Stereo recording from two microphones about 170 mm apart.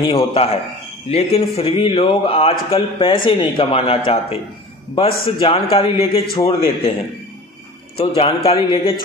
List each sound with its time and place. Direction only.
0.0 s speech: 30° left (ahead or behind)
8.0 s speech: 35° left (ahead or behind)